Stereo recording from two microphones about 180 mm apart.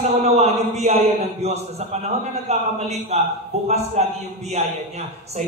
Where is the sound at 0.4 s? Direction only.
35° right (ahead or behind).